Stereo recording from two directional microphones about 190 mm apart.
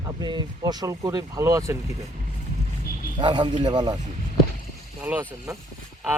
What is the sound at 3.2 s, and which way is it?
Speech, 25° right (ahead or behind).